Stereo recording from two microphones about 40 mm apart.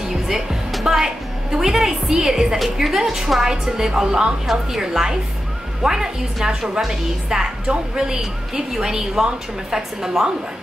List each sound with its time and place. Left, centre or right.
0.1 s a woman's voice: centre